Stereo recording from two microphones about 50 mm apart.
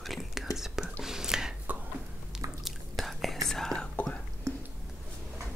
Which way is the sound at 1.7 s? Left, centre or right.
Right.